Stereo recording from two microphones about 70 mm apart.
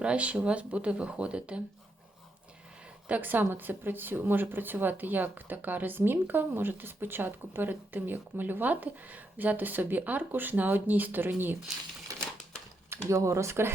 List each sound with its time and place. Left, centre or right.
0.0 s speech: centre
3.1 s speech: right
12.1 s typewriter: right
12.9 s speech: right